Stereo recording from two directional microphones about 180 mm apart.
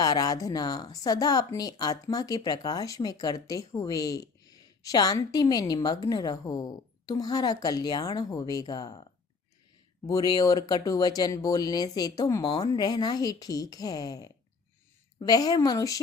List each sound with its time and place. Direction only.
0.0 s speech: 20° left (ahead or behind)
10.1 s speech: 20° left (ahead or behind)